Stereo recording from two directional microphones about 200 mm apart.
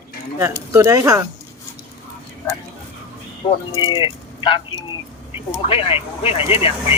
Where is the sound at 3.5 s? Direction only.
20° left (ahead or behind).